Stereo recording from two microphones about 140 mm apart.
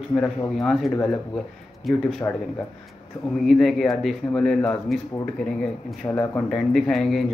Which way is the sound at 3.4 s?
Centre (ahead or behind).